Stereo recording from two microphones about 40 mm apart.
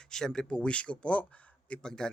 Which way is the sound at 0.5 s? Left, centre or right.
Left.